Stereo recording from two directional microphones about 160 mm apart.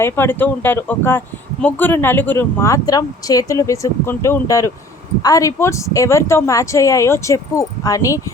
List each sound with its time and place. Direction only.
0.0 s speech: 15° left (ahead or behind)